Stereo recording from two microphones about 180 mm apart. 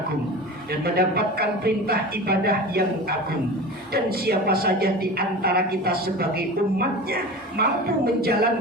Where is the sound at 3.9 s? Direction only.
60° right (ahead or behind).